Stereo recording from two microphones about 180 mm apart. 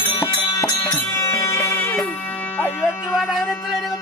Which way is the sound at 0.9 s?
15° left (ahead or behind).